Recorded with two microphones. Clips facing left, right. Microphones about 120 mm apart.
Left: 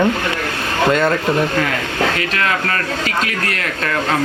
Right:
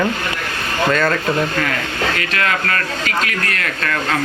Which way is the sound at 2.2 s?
20° left (ahead or behind).